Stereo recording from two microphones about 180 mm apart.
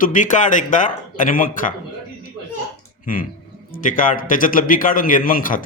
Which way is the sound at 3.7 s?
50° left (ahead or behind).